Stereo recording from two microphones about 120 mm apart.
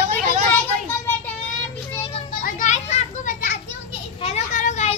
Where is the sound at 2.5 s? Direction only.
85° left.